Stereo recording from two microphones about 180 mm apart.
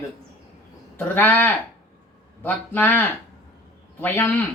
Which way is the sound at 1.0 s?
10° left (ahead or behind).